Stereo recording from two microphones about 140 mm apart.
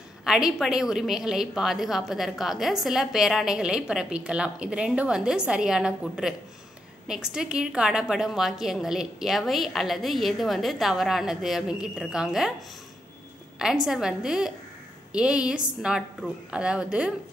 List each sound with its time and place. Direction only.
0.2 s a woman's voice: 5° right (ahead or behind)
13.6 s a woman's voice: 5° right (ahead or behind)